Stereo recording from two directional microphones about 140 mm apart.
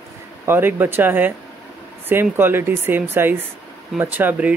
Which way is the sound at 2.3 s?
15° right (ahead or behind).